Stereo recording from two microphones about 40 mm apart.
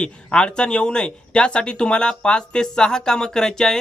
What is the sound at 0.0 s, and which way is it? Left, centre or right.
Speech, left.